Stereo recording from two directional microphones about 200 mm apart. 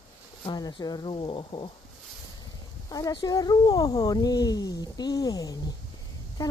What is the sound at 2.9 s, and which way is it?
Speech, 20° left (ahead or behind).